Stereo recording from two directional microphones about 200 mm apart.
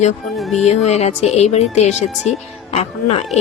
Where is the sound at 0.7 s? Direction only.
35° left (ahead or behind).